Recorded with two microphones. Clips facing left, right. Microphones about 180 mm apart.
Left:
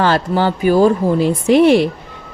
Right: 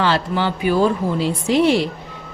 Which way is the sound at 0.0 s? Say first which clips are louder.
Left 4 dB; 45° left (ahead or behind).